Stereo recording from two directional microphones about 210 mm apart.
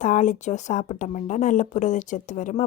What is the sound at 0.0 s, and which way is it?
A woman's voice, 35° left (ahead or behind).